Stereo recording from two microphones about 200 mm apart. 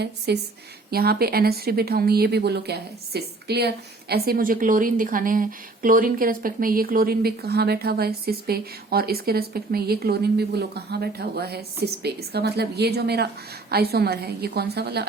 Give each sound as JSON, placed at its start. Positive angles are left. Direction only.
{"t": 0.3, "sound": "a woman's voice", "side_deg": -55}